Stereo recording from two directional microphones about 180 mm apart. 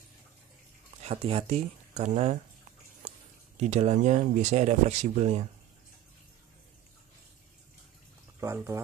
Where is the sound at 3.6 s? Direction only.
40° right (ahead or behind).